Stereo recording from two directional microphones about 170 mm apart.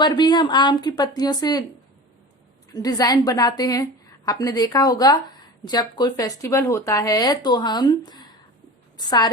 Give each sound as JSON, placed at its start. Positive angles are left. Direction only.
{"t": 0.0, "sound": "a woman's voice", "side_deg": 25}
{"t": 2.7, "sound": "a woman's voice", "side_deg": 20}